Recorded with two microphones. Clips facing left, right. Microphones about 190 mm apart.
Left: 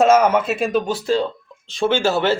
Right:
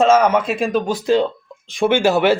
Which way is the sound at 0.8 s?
15° right (ahead or behind).